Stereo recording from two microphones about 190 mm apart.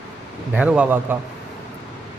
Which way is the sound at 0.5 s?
5° right (ahead or behind).